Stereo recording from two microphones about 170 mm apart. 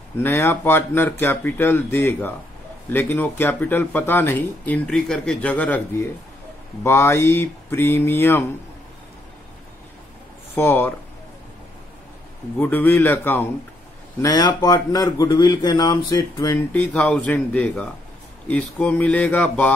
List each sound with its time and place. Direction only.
0.2 s speech: 15° left (ahead or behind)
10.5 s speech: 10° left (ahead or behind)
12.5 s speech: 10° left (ahead or behind)
14.2 s a man's voice: 20° left (ahead or behind)
16.7 s speech: 10° left (ahead or behind)